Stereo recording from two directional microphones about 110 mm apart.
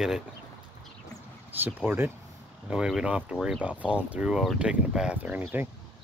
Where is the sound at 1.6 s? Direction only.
20° right (ahead or behind).